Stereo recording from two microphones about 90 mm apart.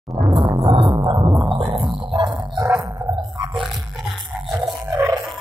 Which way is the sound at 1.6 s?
70° right (ahead or behind).